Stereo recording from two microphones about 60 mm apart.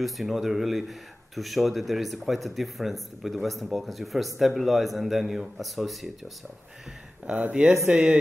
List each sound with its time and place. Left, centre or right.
0.0 s speech: centre
7.3 s speech: right